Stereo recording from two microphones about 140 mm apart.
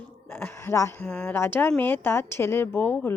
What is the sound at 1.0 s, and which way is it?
A woman's voice, 5° left (ahead or behind).